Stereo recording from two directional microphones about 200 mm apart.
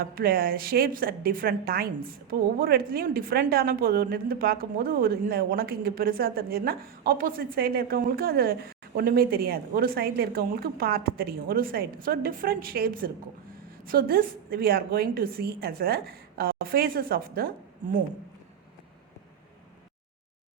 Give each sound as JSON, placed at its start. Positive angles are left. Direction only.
{"t": 0.0, "sound": "a woman's voice", "side_deg": -45}